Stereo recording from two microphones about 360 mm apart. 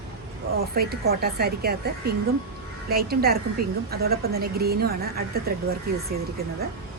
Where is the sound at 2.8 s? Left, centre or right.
Right.